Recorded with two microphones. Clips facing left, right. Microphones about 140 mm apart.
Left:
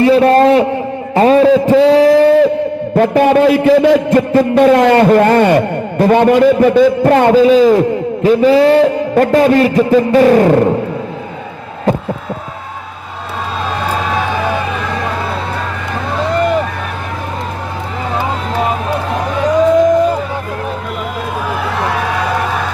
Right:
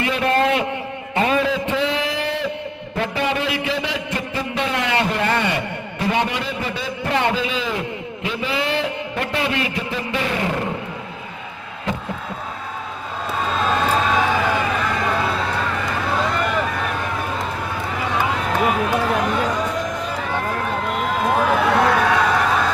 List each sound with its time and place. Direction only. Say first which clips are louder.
0.0 s a man's voice: left 11 dB; 35° left (ahead or behind)